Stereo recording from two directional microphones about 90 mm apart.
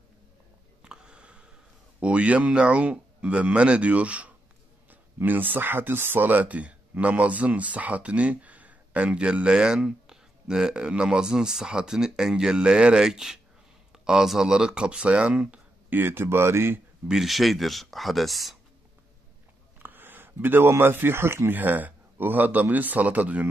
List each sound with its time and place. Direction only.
0.8 s a sound: 10° right (ahead or behind)
2.0 s speech: 15° right (ahead or behind)
17.1 s speech: centre (ahead or behind)
19.8 s speech: 20° right (ahead or behind)